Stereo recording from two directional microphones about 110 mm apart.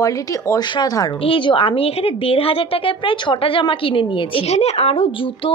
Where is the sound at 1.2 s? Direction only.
50° left (ahead or behind).